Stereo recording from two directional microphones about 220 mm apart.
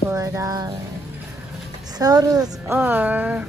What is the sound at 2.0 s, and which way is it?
A woman's voice, 15° right (ahead or behind).